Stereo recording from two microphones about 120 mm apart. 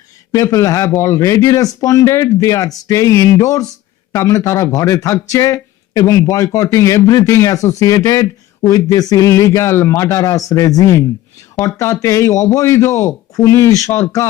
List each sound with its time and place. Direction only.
0.3 s a man's voice: 30° left (ahead or behind)